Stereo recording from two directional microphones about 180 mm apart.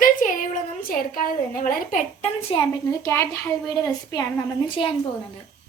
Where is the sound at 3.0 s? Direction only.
15° left (ahead or behind).